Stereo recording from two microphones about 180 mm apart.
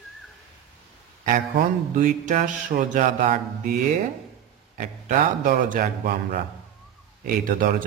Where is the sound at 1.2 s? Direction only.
45° right (ahead or behind).